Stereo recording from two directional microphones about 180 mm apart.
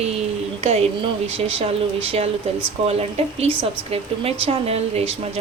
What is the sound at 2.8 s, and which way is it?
Speech, 35° right (ahead or behind).